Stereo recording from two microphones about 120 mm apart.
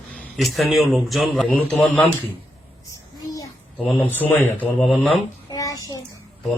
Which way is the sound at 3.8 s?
15° left (ahead or behind).